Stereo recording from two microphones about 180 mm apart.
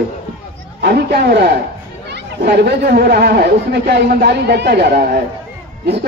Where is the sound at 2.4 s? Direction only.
60° right (ahead or behind).